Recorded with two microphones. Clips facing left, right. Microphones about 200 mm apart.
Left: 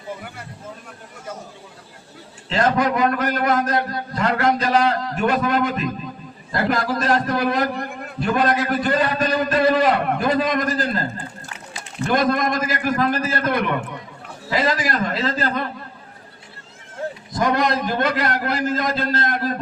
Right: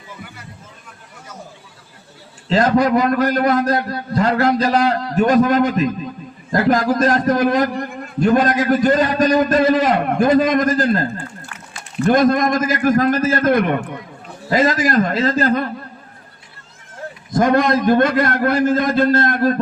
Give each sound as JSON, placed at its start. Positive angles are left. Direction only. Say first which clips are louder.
{"t": 2.5, "sound": "a man's voice", "louder": "right 5 dB", "side_deg": -35}
{"t": 12.0, "sound": "a man's voice", "louder": "right 5 dB", "side_deg": -50}
{"t": 17.3, "sound": "a man's voice", "louder": "right 6 dB", "side_deg": -50}